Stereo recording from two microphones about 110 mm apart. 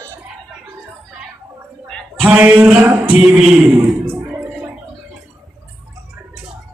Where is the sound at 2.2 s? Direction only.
15° right (ahead or behind).